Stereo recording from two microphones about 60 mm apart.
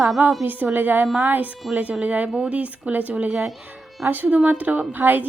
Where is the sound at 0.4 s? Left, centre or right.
Right.